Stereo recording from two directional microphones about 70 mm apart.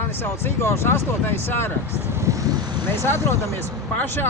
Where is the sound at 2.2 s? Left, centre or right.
Right.